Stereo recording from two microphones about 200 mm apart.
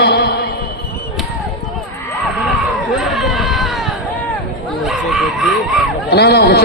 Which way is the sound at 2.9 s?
Centre (ahead or behind).